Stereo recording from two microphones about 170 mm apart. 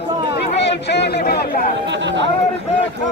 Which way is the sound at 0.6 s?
80° left.